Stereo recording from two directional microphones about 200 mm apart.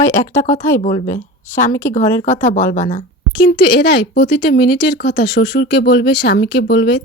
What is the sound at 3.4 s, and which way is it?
Speech, 60° left (ahead or behind).